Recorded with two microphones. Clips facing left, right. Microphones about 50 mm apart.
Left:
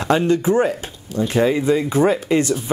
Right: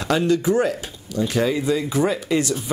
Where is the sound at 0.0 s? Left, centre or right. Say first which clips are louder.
Left 2 dB; left.